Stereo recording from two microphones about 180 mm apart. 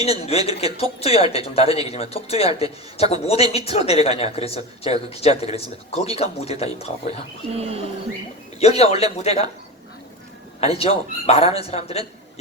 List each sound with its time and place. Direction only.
0.0 s a man's voice: 35° left (ahead or behind)
7.5 s speech: 35° right (ahead or behind)
8.5 s a man's voice: 35° left (ahead or behind)
10.6 s a man's voice: 35° left (ahead or behind)